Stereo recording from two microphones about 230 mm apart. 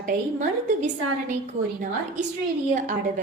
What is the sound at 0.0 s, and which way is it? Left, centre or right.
Speech, right.